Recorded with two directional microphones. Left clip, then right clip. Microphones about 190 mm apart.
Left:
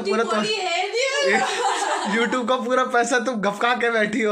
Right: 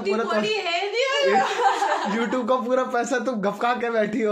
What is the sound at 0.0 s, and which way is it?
Speech, centre (ahead or behind).